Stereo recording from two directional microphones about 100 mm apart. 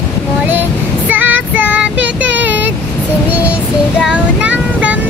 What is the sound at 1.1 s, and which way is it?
Child singing, 15° right (ahead or behind).